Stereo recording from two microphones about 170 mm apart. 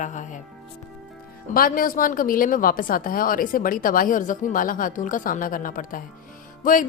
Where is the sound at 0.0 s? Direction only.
45° left (ahead or behind).